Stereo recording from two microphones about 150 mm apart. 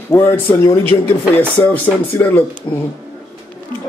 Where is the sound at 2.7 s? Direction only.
25° left (ahead or behind).